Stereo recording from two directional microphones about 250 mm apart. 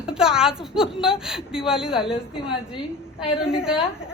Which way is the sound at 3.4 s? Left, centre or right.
Centre.